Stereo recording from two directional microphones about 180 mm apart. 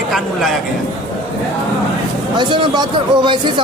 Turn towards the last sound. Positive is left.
turn(degrees=-25)  # may be behind; listen again after turning